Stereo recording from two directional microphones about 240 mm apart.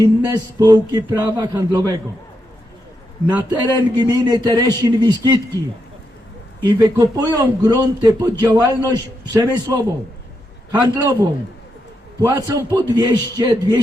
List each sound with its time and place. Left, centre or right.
0.0 s a man's voice: centre
3.2 s a man's voice: centre
3.8 s a man's voice: centre
6.7 s a man's voice: centre
12.2 s a man's voice: centre